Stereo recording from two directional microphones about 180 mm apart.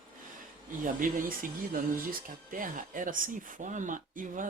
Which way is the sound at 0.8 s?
50° right (ahead or behind).